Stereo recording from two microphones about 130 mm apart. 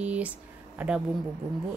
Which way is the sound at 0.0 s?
10° right (ahead or behind).